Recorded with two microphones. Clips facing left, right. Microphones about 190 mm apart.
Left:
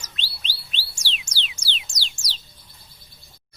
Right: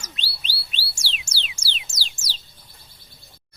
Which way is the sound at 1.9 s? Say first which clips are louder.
Even; 5° right (ahead or behind).